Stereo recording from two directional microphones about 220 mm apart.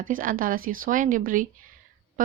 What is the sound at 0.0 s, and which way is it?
A woman's voice, 40° right (ahead or behind).